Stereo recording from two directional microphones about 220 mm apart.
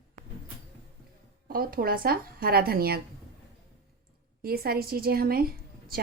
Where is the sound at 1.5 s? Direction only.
40° right (ahead or behind).